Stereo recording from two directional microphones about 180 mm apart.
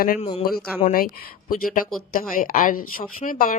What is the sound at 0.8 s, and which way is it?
Speech, 45° left (ahead or behind).